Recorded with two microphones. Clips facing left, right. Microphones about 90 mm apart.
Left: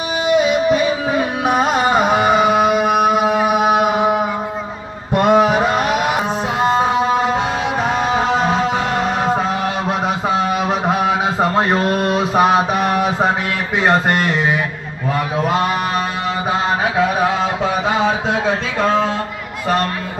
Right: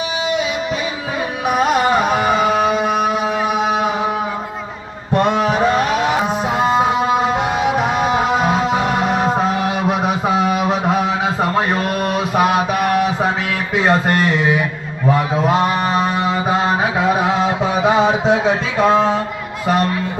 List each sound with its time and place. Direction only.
1.5 s carnatic music: 30° left (ahead or behind); by 4.1 s 10° left (ahead or behind)
5.1 s music: 5° left (ahead or behind)
6.6 s music: 10° right (ahead or behind)
10.2 s mantra: 5° right (ahead or behind)
11.5 s a sound: 30° left (ahead or behind)
13.8 s speech: 10° left (ahead or behind)
17.4 s a sound: 15° right (ahead or behind)
19.6 s speech: 5° right (ahead or behind)